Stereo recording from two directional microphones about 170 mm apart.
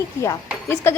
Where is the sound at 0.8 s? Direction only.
15° left (ahead or behind).